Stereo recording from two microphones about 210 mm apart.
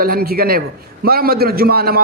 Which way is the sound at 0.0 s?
45° right (ahead or behind).